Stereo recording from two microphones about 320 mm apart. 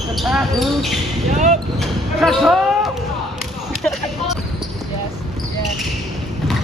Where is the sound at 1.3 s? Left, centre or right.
Right.